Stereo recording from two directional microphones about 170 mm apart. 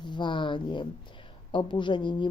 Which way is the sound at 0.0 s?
25° left (ahead or behind).